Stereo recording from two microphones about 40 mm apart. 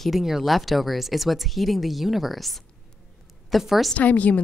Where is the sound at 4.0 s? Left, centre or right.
Left.